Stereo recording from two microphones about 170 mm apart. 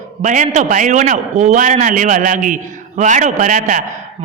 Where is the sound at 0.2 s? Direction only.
45° right (ahead or behind).